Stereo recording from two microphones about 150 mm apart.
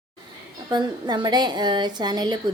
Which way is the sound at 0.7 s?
30° right (ahead or behind).